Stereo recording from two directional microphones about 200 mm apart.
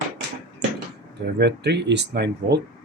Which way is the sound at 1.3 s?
55° right (ahead or behind).